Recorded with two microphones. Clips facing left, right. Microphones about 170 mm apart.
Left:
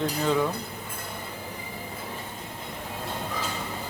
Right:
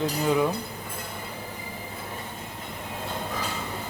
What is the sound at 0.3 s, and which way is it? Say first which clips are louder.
Speech: right 2 dB; 10° right (ahead or behind).